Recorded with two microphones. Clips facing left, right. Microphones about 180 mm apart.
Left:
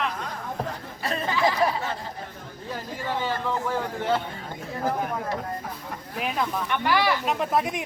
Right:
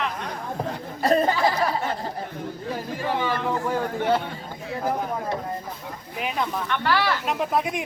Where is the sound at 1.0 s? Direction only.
40° right (ahead or behind).